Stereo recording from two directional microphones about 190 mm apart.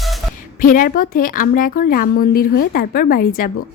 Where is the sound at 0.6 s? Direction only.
45° left (ahead or behind).